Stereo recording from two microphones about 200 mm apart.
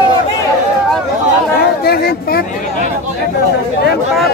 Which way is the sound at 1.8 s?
50° left (ahead or behind).